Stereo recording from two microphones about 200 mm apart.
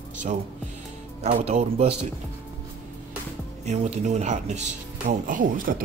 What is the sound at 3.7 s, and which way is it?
Speech, 35° right (ahead or behind).